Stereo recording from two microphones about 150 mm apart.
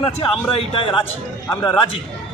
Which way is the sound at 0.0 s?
40° left (ahead or behind).